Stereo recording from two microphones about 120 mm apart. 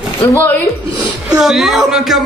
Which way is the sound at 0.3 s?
15° left (ahead or behind).